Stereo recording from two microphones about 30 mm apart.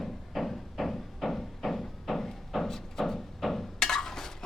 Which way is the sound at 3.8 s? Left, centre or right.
Centre.